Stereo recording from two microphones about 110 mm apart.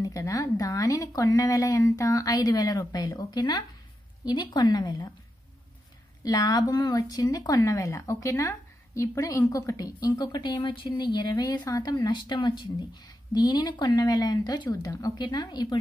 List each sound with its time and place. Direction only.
0.0 s speech: 30° left (ahead or behind)
6.2 s speech: 35° left (ahead or behind)